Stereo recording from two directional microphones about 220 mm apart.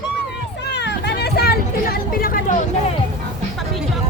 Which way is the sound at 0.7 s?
50° left (ahead or behind).